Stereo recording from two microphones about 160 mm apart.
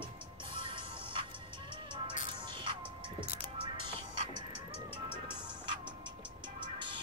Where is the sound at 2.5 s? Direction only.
30° right (ahead or behind).